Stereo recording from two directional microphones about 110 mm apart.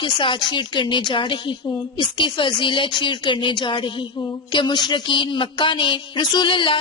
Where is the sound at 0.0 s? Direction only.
50° left (ahead or behind).